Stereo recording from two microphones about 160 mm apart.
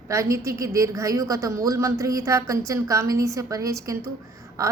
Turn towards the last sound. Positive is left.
turn(degrees=-20)  # may be behind; listen again after turning